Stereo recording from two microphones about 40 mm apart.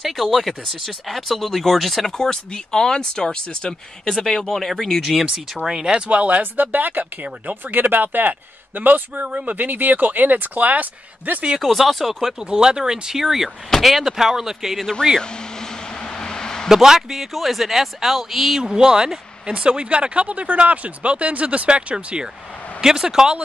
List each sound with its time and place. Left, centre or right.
0.0 s speech: centre
2.1 s speech: centre
4.2 s speech: centre
5.6 s speech: right
6.4 s a man's voice: right
9.6 s a man's voice: right
11.6 s speech: centre
12.4 s speech: centre
15.1 s vehicle: centre
16.7 s speech: centre
18.6 s speech: centre